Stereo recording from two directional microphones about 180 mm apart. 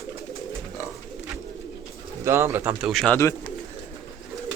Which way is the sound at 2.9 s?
Centre (ahead or behind).